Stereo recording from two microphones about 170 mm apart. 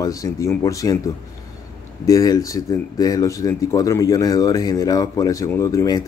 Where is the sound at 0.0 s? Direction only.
20° left (ahead or behind).